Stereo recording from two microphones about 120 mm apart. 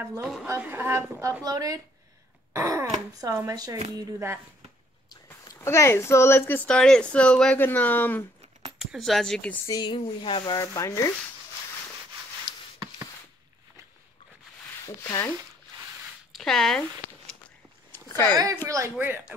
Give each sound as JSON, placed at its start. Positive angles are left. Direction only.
{"t": 0.2, "sound": "a woman's voice", "side_deg": 0}
{"t": 0.6, "sound": "a woman's voice", "side_deg": -15}
{"t": 1.4, "sound": "a woman's voice", "side_deg": -30}
{"t": 5.4, "sound": "speech", "side_deg": 30}
{"t": 8.7, "sound": "speech", "side_deg": 0}
{"t": 9.7, "sound": "speech", "side_deg": 40}
{"t": 10.5, "sound": "sanding", "side_deg": 25}
{"t": 15.0, "sound": "sanding", "side_deg": 25}
{"t": 16.3, "sound": "speech", "side_deg": 0}
{"t": 18.0, "sound": "a sound", "side_deg": 20}
{"t": 18.3, "sound": "a woman's voice", "side_deg": -30}